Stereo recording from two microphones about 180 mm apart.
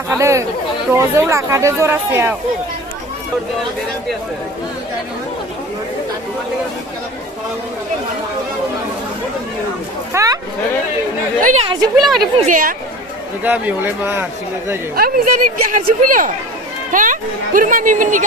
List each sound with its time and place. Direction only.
0.1 s speech: 15° right (ahead or behind)
10.1 s speech: 15° right (ahead or behind)
11.6 s speech: 25° right (ahead or behind)
11.9 s speech: centre (ahead or behind)
12.5 s speech: 50° right (ahead or behind)
13.4 s speech: 10° right (ahead or behind)
14.9 s speech: 55° right (ahead or behind)